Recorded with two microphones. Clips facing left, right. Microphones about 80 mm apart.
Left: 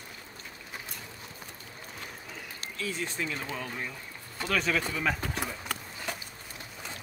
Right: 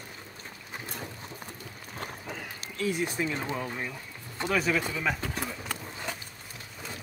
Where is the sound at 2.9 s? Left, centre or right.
Centre.